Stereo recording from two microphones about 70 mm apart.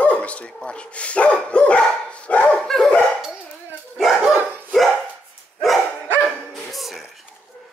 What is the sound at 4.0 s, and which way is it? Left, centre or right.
Dog, centre.